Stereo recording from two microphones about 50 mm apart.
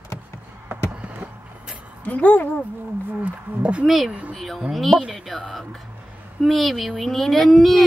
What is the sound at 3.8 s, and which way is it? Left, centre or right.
Speech, centre.